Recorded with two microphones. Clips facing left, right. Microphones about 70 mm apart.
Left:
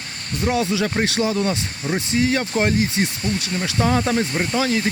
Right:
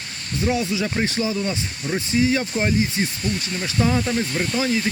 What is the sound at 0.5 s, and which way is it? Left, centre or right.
Speech, left.